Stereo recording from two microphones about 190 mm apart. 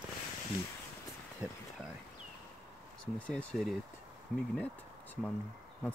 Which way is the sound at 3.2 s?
5° left (ahead or behind).